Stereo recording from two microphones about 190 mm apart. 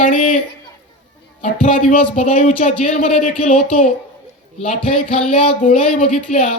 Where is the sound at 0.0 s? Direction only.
35° left (ahead or behind).